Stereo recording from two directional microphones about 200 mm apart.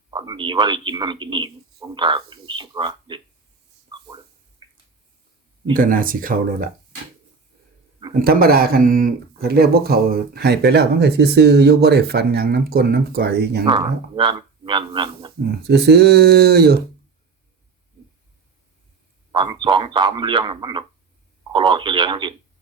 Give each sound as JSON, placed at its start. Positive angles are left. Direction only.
{"t": 0.1, "sound": "a man's voice", "side_deg": -25}
{"t": 3.9, "sound": "a sound", "side_deg": -20}
{"t": 5.7, "sound": "speech", "side_deg": -45}
{"t": 8.2, "sound": "speech", "side_deg": -50}
{"t": 13.7, "sound": "speech", "side_deg": -25}
{"t": 15.6, "sound": "speech", "side_deg": -55}
{"t": 19.3, "sound": "speech", "side_deg": -25}